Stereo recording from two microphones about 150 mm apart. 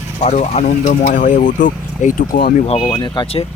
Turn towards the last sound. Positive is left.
turn(degrees=30)  # may be behind; listen again after turning